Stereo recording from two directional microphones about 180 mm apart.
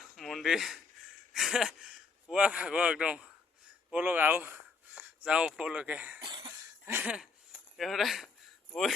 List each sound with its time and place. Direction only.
0.2 s a sound: centre (ahead or behind)
1.3 s speech: centre (ahead or behind)
6.2 s cough: 25° right (ahead or behind)
6.8 s speech: 10° right (ahead or behind)